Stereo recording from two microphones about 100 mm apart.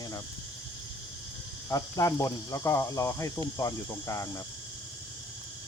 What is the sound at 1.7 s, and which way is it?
Cricket, 35° left (ahead or behind).